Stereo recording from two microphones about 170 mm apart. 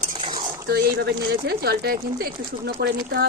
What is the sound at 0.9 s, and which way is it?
Speech, 70° right (ahead or behind).